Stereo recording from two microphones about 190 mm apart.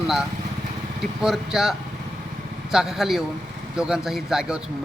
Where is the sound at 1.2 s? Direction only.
Centre (ahead or behind).